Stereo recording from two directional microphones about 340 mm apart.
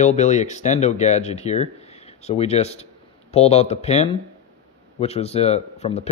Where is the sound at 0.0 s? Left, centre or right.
Centre.